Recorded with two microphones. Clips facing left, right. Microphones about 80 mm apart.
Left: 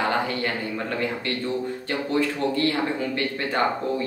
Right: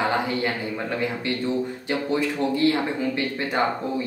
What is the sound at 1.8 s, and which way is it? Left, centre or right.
Speech, centre.